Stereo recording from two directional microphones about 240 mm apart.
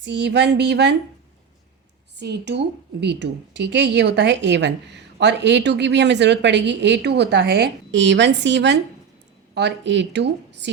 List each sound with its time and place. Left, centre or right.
0.0 s a woman's voice: right
2.1 s a woman's voice: right